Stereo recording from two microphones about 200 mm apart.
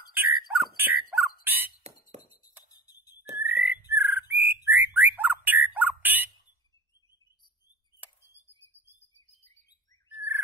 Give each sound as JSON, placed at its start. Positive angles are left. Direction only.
{"t": 0.1, "sound": "a sound", "side_deg": -10}
{"t": 1.8, "sound": "crow", "side_deg": -35}
{"t": 2.6, "sound": "music", "side_deg": 20}
{"t": 3.3, "sound": "bird", "side_deg": -10}
{"t": 10.1, "sound": "bird", "side_deg": -10}